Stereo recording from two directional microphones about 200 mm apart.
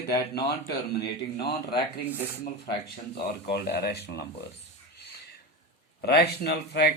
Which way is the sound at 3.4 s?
55° left (ahead or behind).